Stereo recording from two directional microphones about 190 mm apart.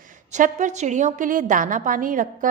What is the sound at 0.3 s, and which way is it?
A woman's voice, 40° right (ahead or behind).